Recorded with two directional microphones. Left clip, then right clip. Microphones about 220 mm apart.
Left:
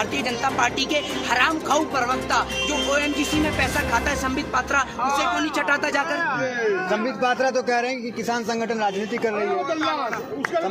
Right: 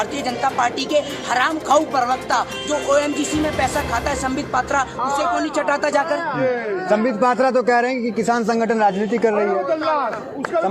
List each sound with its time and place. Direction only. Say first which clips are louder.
0.4 s speech: right 3 dB; 10° right (ahead or behind)
6.9 s a man's voice: right 5 dB; 35° right (ahead or behind)